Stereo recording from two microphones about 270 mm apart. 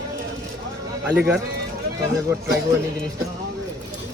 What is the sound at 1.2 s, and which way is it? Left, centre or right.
Speech, centre.